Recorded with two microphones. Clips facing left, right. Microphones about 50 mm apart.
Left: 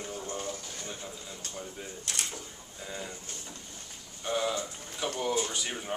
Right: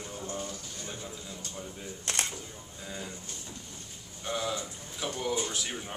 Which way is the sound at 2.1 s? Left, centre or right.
Right.